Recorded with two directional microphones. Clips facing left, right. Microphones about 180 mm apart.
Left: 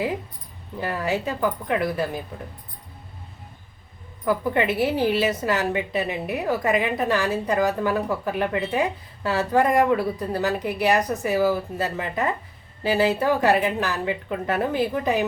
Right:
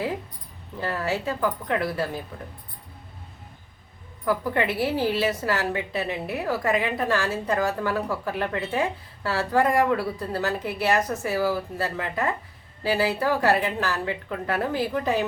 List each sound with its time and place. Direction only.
0.8 s a woman's voice: 15° left (ahead or behind)
4.3 s a woman's voice: 20° left (ahead or behind)